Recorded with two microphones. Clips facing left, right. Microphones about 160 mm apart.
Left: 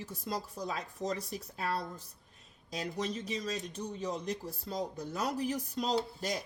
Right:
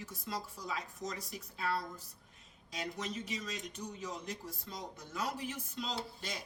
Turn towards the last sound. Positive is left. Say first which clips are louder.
# left 8 dB
turn(degrees=40)  # may be behind; listen again after turning